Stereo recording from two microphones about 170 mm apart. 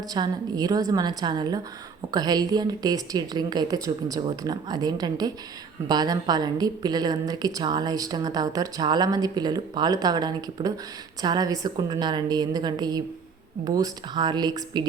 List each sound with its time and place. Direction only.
0.1 s a woman's voice: 25° right (ahead or behind)